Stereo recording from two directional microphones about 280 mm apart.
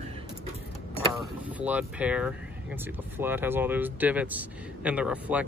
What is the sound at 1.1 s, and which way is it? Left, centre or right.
Speech, centre.